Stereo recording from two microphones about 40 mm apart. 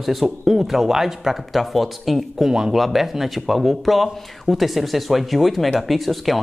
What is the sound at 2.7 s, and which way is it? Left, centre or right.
Speech, centre.